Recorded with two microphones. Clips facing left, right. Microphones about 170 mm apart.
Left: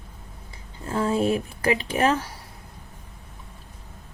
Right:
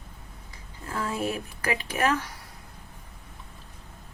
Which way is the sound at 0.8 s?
30° left (ahead or behind).